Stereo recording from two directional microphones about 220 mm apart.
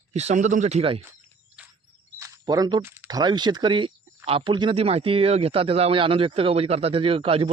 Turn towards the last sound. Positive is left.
turn(degrees=-25)  # may be behind; listen again after turning